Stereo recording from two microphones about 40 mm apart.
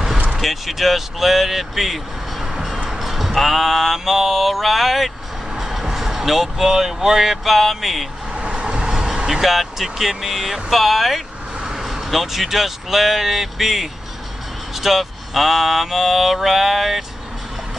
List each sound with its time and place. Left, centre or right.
0.4 s speech: centre
2.9 s mantra: centre
5.6 s speech: centre
8.3 s vehicle: right
8.9 s speech: centre